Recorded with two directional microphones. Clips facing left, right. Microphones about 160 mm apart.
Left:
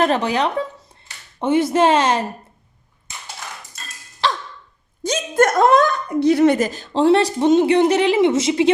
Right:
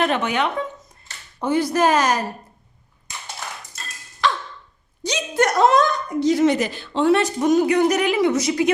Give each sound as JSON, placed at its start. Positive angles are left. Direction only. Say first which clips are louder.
{"t": 0.0, "sound": "speech", "louder": "left 3 dB", "side_deg": 35}
{"t": 1.4, "sound": "a woman's voice", "louder": "left 3 dB", "side_deg": 25}
{"t": 4.2, "sound": "sigh", "louder": "even", "side_deg": 35}
{"t": 5.0, "sound": "speech", "louder": "left 4 dB", "side_deg": 50}